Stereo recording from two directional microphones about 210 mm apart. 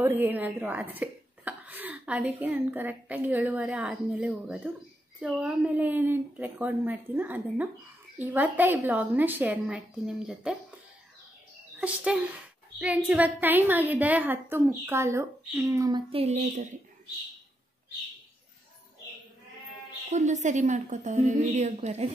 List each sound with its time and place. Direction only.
0.0 s speech: 10° right (ahead or behind)
11.8 s a woman's voice: 5° right (ahead or behind); by 16.6 s 30° right (ahead or behind)
20.1 s a woman's voice: 35° right (ahead or behind)